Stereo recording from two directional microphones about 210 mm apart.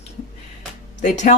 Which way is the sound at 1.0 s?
35° left (ahead or behind).